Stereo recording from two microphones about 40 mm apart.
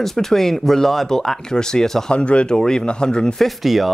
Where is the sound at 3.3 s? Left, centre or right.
Centre.